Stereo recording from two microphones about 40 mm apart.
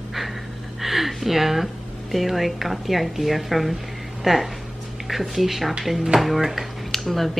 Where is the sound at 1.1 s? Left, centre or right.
Centre.